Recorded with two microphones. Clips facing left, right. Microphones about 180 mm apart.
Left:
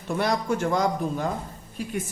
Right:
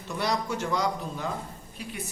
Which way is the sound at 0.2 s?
50° left (ahead or behind).